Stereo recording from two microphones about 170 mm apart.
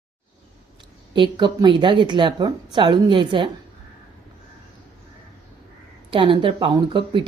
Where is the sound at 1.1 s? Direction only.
30° right (ahead or behind).